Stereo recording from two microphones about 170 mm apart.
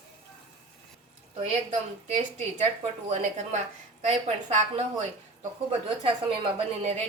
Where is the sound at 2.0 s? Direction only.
40° right (ahead or behind).